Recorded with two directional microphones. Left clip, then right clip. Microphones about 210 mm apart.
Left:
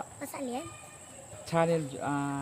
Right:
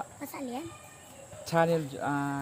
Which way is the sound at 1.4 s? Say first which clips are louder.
Right 1 dB; 25° right (ahead or behind).